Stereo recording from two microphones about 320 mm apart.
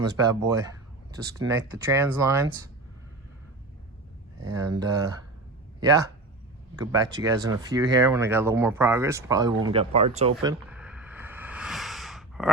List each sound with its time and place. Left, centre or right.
0.0 s speech: centre
4.8 s speech: centre
6.7 s speech: centre
10.4 s a sound: centre